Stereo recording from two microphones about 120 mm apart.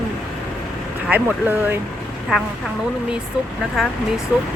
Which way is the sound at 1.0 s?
15° right (ahead or behind).